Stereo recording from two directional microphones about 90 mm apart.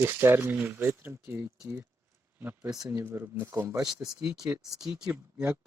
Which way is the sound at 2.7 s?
40° right (ahead or behind).